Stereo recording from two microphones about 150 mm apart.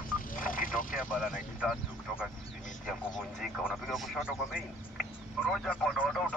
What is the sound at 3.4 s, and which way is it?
A man's voice, centre (ahead or behind).